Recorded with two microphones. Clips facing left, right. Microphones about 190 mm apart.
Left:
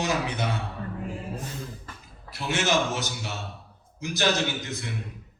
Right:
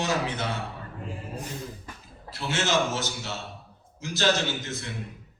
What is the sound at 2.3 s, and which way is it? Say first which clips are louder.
A man's voice: left 1 dB; 15° left (ahead or behind).